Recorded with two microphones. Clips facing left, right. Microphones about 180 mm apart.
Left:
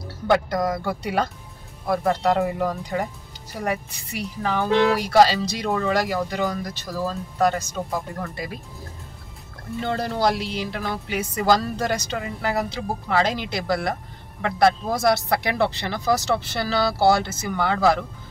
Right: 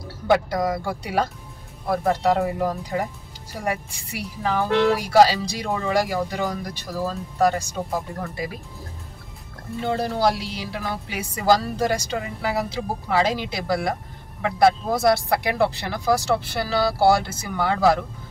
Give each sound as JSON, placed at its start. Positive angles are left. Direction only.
{"t": 0.3, "sound": "a woman's voice", "side_deg": -5}
{"t": 9.8, "sound": "a woman's voice", "side_deg": -5}